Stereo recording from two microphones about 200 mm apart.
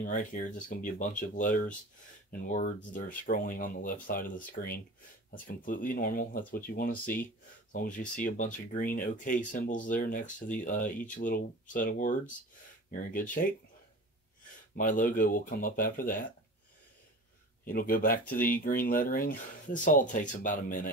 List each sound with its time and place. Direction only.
0.0 s speech: 40° left (ahead or behind)
14.8 s speech: 40° left (ahead or behind)
17.6 s speech: 45° left (ahead or behind)